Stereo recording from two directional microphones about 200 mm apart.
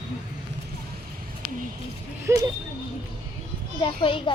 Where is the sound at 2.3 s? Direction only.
15° right (ahead or behind).